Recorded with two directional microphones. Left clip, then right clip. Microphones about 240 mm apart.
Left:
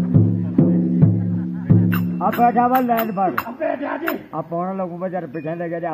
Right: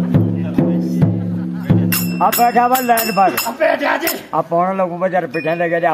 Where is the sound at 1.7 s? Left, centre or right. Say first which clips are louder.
Right 3 dB; right.